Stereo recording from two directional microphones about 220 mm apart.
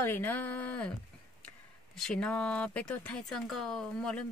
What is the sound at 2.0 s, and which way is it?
Speech, 5° left (ahead or behind).